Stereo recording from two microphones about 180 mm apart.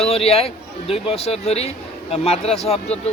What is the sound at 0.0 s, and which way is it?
A man's voice, 35° left (ahead or behind).